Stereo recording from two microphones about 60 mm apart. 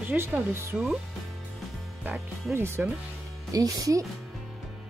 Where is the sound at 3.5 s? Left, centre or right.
Right.